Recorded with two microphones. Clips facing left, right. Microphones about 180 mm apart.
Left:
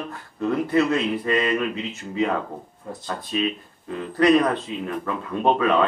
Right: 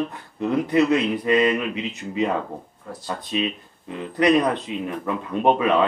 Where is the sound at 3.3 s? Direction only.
20° right (ahead or behind).